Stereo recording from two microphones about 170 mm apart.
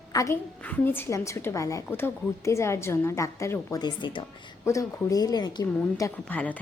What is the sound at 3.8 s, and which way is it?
A woman's voice, 30° left (ahead or behind).